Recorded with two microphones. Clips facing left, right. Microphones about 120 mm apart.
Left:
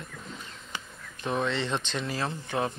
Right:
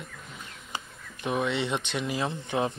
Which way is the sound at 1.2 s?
15° right (ahead or behind).